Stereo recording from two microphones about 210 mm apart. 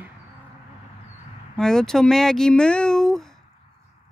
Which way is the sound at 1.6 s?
5° left (ahead or behind).